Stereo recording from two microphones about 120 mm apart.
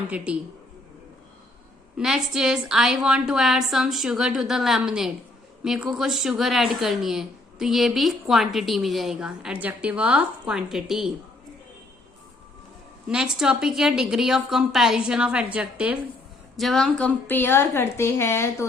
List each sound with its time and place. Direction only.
2.0 s speech: 5° right (ahead or behind)
13.1 s speech: 5° right (ahead or behind)
16.6 s speech: centre (ahead or behind)
17.0 s a woman's voice: 15° left (ahead or behind)